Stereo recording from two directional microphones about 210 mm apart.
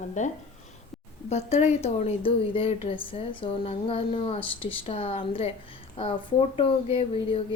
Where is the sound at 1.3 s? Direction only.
30° left (ahead or behind).